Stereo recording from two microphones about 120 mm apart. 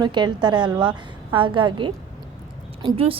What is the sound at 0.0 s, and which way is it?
A woman's voice, 35° right (ahead or behind).